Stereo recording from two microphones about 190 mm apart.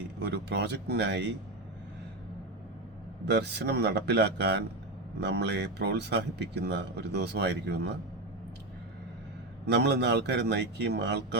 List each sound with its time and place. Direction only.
0.2 s speech: 60° right (ahead or behind)
3.2 s speech: 60° right (ahead or behind)
9.6 s speech: 60° right (ahead or behind)